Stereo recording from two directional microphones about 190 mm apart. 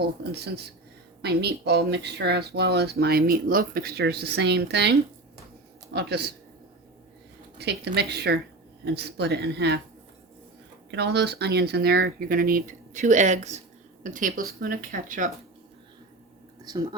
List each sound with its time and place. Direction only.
0.3 s speech: 60° right (ahead or behind)
7.6 s speech: 60° right (ahead or behind)
10.9 s speech: 60° right (ahead or behind); by 15.3 s 45° right (ahead or behind)